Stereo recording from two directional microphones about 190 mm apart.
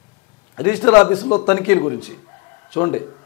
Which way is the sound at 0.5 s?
10° left (ahead or behind).